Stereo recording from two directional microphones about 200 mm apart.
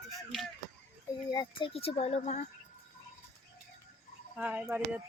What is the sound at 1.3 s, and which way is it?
Speech, 20° left (ahead or behind).